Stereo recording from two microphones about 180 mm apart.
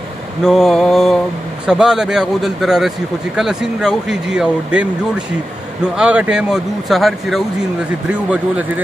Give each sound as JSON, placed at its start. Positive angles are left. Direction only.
{"t": 0.4, "sound": "speech", "side_deg": 0}